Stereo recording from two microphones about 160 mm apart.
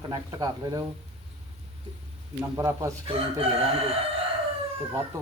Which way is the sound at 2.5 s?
20° right (ahead or behind).